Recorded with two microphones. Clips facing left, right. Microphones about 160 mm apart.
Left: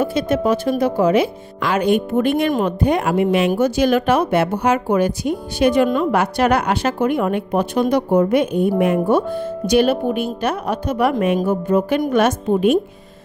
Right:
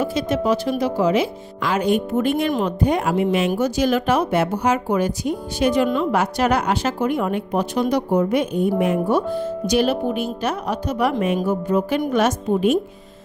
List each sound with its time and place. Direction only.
0.0 s speech: 55° left (ahead or behind)